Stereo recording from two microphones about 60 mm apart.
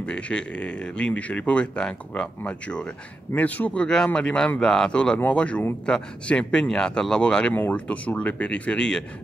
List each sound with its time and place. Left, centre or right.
0.0 s speech: centre